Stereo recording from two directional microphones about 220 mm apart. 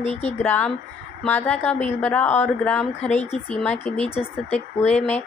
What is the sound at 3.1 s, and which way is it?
Speech, 30° left (ahead or behind).